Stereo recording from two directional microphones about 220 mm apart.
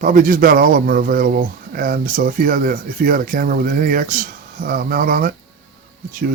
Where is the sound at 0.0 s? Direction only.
35° right (ahead or behind).